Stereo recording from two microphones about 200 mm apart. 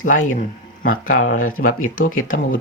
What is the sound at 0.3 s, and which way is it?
Speech, 40° left (ahead or behind).